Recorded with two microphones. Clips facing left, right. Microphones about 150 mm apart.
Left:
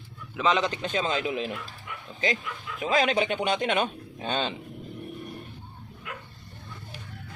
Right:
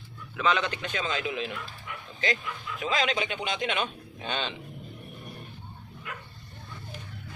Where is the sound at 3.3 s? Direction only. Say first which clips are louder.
Left 5 dB; 50° left (ahead or behind).